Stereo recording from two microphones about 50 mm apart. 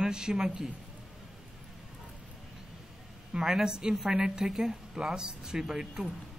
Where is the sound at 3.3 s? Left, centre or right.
Centre.